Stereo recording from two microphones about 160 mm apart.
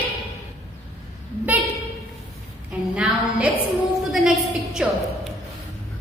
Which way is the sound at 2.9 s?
5° right (ahead or behind).